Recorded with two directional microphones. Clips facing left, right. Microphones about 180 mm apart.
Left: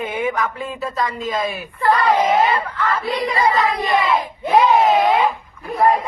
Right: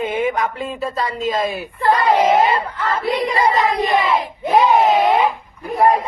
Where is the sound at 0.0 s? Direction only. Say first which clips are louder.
Right 2 dB; 25° right (ahead or behind).